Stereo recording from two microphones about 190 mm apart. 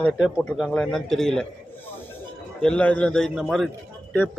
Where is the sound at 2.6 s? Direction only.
5° left (ahead or behind).